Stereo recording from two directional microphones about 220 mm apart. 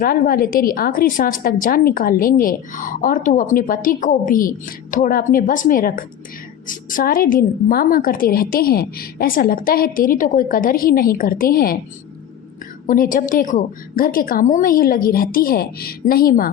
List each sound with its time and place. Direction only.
0.0 s a woman's voice: 40° left (ahead or behind)
12.9 s a woman's voice: 40° left (ahead or behind)